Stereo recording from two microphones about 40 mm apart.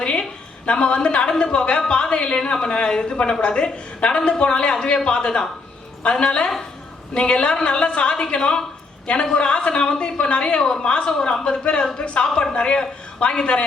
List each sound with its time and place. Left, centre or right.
0.0 s a sound: left
0.6 s a woman's voice: left
11.6 s a woman's voice: left
12.2 s a woman's voice: centre